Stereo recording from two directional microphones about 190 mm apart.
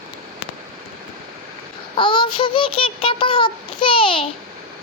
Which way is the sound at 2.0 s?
25° left (ahead or behind).